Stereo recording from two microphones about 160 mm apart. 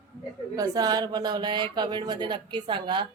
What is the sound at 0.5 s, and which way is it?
Speech, 25° right (ahead or behind).